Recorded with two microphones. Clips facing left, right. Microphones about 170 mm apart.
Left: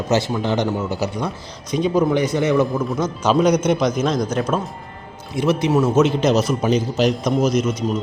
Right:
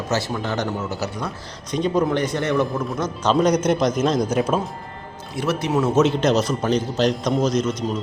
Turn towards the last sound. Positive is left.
turn(degrees=5)  # may be behind; listen again after turning